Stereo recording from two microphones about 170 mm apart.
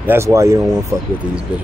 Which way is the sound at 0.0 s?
15° right (ahead or behind).